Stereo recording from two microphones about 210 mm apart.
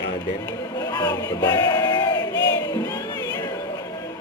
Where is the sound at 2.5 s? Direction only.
20° left (ahead or behind).